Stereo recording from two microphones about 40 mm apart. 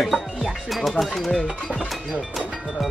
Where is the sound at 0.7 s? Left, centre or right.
Centre.